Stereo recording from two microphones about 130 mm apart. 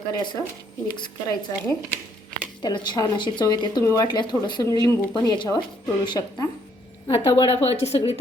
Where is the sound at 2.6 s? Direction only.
35° left (ahead or behind).